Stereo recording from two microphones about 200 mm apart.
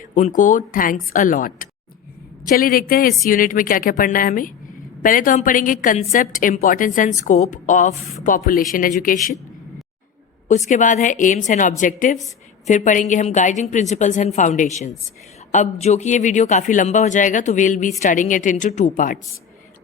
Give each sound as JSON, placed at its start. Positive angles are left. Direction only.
{"t": 0.0, "sound": "a woman's voice", "side_deg": 40}
{"t": 10.5, "sound": "a woman's voice", "side_deg": 40}